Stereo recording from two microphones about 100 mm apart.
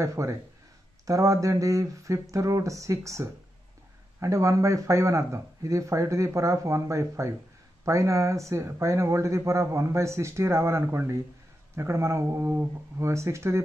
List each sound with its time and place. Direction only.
0.0 s speech: 30° right (ahead or behind)